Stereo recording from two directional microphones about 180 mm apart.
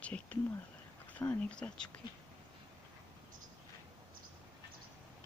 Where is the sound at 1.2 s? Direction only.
5° left (ahead or behind).